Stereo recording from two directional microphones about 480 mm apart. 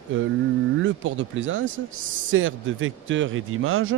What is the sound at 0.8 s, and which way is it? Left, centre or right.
A man's voice, right.